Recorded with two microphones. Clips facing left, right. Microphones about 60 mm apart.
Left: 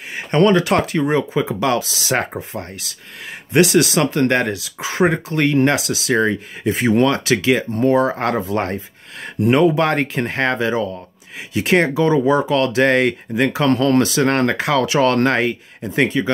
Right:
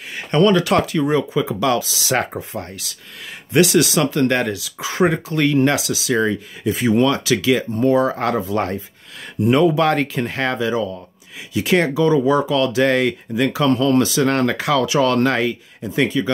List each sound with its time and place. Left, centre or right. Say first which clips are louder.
0.5 s speech: even; left
2.1 s speech: even; left
12.5 s speech: left 1 dB; left
13.7 s speech: even; left